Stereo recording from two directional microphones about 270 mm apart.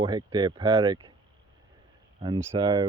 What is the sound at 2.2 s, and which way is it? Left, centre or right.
Speech, centre.